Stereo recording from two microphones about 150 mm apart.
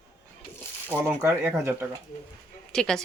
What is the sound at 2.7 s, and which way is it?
Speech, 5° left (ahead or behind).